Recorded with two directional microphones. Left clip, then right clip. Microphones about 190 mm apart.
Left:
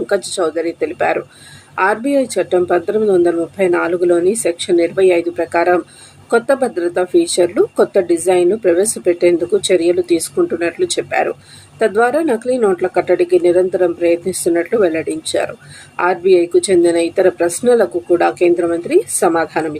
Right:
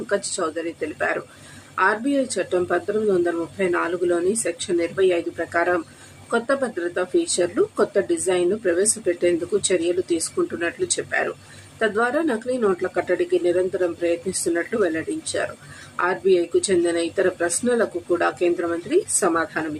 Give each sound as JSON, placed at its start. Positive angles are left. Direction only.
{"t": 0.3, "sound": "speech", "side_deg": 20}